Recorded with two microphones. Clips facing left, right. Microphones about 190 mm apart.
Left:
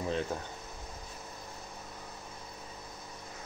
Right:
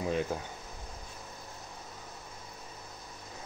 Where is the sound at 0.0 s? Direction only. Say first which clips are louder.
Right 2 dB; 10° right (ahead or behind).